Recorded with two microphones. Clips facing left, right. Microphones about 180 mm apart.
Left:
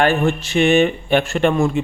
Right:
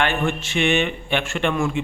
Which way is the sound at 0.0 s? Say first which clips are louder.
Left 6 dB; 35° left (ahead or behind).